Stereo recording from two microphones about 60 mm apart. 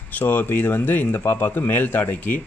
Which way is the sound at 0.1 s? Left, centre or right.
Left.